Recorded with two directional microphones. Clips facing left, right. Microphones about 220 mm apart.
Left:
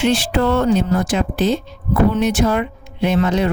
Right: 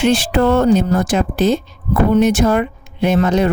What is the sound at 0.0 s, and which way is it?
Speech, 45° right (ahead or behind).